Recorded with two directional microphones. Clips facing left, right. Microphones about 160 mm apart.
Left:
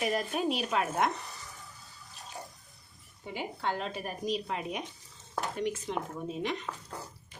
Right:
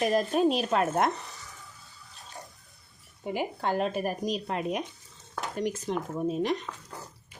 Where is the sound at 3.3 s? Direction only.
50° right (ahead or behind).